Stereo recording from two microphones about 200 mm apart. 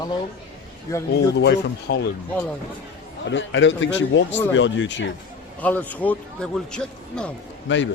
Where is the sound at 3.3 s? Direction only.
65° left (ahead or behind).